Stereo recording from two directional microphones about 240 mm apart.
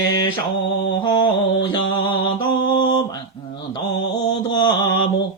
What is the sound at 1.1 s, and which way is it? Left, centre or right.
Mantra, centre.